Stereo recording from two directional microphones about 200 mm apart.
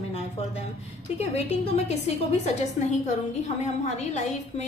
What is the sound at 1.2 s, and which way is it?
A woman's voice, 35° left (ahead or behind).